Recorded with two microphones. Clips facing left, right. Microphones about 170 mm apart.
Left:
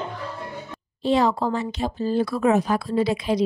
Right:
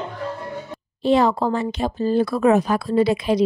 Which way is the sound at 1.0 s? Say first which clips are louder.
Right 3 dB; 55° right (ahead or behind).